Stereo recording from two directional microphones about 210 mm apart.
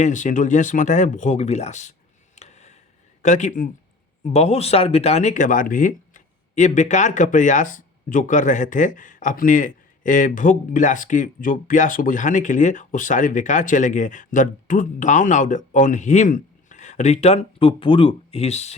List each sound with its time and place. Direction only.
0.0 s speech: 35° left (ahead or behind)
2.3 s a sound: 35° left (ahead or behind)
3.2 s speech: 35° left (ahead or behind)